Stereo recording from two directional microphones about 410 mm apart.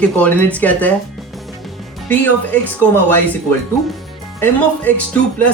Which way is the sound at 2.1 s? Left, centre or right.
Centre.